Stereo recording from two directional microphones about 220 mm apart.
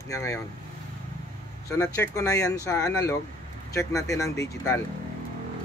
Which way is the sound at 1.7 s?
15° left (ahead or behind).